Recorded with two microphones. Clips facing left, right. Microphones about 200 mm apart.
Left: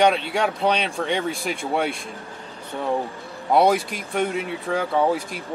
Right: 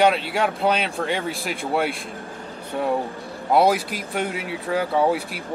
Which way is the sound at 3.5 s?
5° right (ahead or behind).